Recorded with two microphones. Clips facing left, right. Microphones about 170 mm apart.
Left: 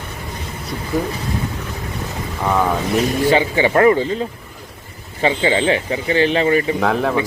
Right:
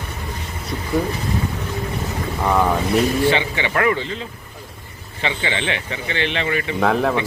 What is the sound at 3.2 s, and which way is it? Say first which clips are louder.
Speech: left 4 dB; 40° left (ahead or behind).